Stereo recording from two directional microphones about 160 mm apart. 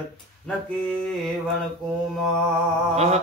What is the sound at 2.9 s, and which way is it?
Mantra, 45° right (ahead or behind).